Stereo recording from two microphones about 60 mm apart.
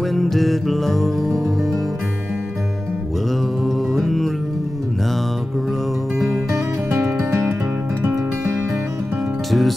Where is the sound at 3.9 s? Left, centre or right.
Centre.